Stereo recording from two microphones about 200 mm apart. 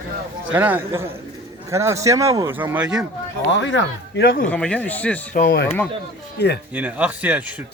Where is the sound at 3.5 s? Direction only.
65° left (ahead or behind); by 4.4 s 50° left (ahead or behind).